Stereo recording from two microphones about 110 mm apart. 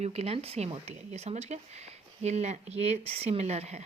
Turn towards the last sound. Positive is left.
turn(degrees=-75)  # may be behind; listen again after turning